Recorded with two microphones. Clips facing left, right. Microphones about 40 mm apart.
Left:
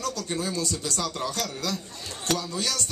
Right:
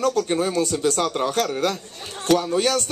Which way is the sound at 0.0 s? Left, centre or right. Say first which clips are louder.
Right 9 dB; right.